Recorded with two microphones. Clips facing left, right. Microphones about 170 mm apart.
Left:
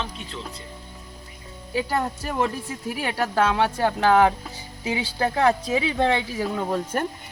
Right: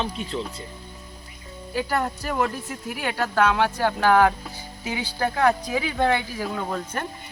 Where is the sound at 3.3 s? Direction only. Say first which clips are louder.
Right 1 dB; 30° left (ahead or behind).